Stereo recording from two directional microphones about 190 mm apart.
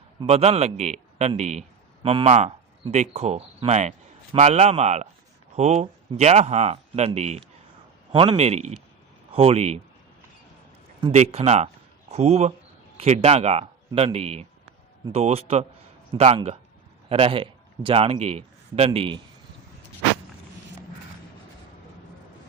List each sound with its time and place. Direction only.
0.2 s speech: 35° right (ahead or behind)
11.1 s speech: 35° right (ahead or behind)